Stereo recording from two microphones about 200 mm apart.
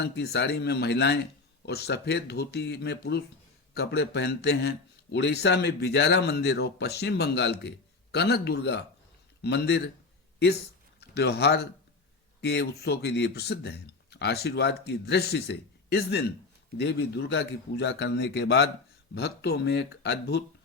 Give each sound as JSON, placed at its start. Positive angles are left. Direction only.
{"t": 0.0, "sound": "speech", "side_deg": 55}
{"t": 11.1, "sound": "speech", "side_deg": 55}